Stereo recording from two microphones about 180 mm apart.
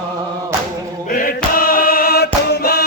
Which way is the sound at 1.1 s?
50° left (ahead or behind).